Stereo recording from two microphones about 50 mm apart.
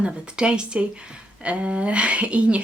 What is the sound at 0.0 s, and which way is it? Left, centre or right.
Speech, centre.